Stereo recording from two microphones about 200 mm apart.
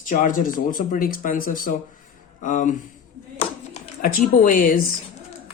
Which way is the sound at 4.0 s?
45° left (ahead or behind).